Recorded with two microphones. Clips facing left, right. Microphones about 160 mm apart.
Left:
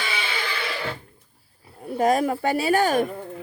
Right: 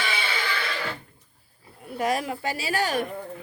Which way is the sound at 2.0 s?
45° left (ahead or behind).